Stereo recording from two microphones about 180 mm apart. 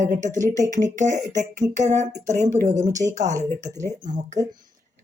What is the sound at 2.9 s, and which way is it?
Speech, 20° right (ahead or behind).